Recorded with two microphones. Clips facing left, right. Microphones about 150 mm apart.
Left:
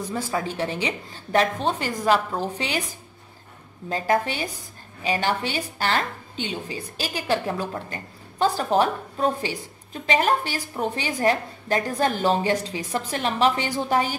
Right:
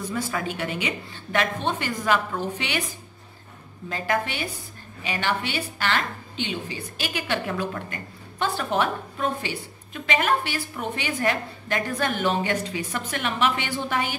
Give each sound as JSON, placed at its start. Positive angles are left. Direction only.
{"t": 0.1, "sound": "a woman's voice", "side_deg": 30}